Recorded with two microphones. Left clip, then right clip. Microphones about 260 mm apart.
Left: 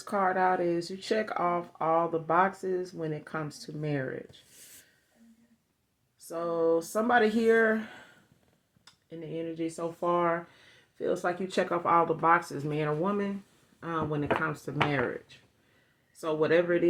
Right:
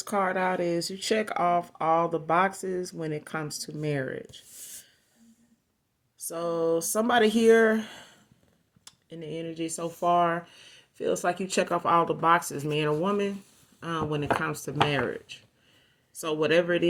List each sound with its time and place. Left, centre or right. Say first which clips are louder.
0.0 s speech: even; right
6.2 s speech: right 1 dB; right
9.0 s speech: right 1 dB; right